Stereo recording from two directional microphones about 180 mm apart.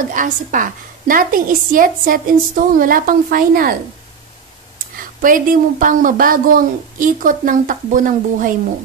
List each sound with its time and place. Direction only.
0.1 s a woman's voice: 45° right (ahead or behind)
5.2 s a woman's voice: 50° right (ahead or behind)